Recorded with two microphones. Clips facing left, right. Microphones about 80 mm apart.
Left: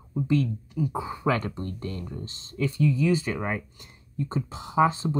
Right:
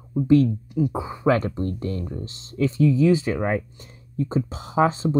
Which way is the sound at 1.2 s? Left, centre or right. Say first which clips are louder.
Right 7 dB; right.